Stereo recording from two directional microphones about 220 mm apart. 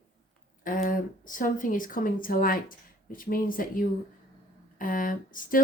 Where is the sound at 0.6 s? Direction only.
40° left (ahead or behind).